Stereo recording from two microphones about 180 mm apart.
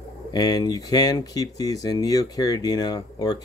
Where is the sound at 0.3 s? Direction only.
20° left (ahead or behind).